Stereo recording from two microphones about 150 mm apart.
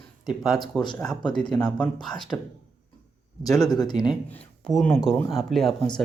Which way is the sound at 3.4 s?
25° left (ahead or behind).